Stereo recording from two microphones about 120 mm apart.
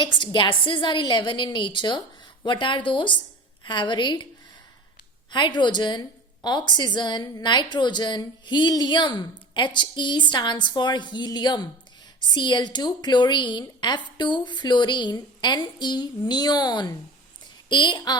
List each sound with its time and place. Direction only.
0.0 s a woman's voice: 40° left (ahead or behind)
5.3 s a woman's voice: 40° left (ahead or behind)